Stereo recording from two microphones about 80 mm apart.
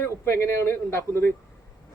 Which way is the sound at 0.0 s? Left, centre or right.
Left.